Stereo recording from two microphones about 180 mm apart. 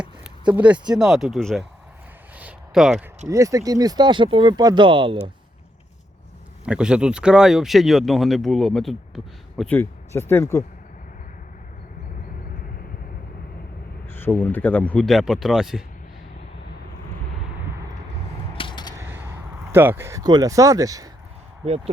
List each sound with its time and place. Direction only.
0.5 s speech: 10° right (ahead or behind)
2.4 s a sound: 5° right (ahead or behind)
3.2 s speech: 20° right (ahead or behind)
6.7 s speech: 5° right (ahead or behind)
9.7 s speech: 15° left (ahead or behind)
14.1 s speech: 10° left (ahead or behind)
18.5 s creak: 25° left (ahead or behind)
18.9 s a sound: 10° right (ahead or behind)
19.7 s speech: 10° right (ahead or behind)